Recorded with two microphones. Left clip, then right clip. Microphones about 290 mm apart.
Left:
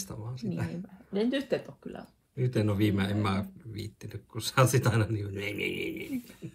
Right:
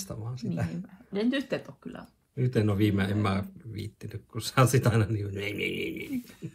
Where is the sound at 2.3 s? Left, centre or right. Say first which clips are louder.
Right 2 dB; centre.